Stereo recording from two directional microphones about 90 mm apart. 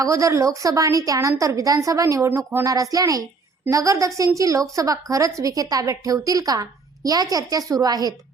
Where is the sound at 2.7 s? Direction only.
45° right (ahead or behind).